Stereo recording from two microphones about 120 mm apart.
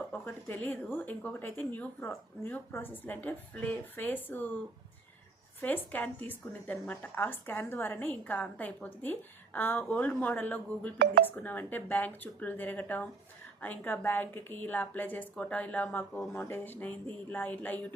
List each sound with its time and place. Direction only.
0.1 s a woman's voice: 15° left (ahead or behind)
5.6 s a woman's voice: 15° left (ahead or behind)